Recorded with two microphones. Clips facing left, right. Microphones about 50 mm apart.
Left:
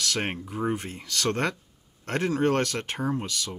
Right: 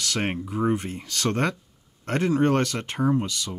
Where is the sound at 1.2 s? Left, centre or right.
Right.